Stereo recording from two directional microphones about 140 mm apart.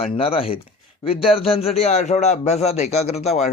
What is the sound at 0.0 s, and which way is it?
A man's voice, 40° left (ahead or behind).